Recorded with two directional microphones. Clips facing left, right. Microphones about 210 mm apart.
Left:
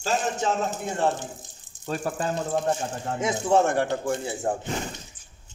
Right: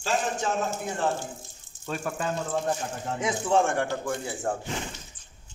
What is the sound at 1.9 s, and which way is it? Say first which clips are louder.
Speech: left 3 dB; 35° left (ahead or behind).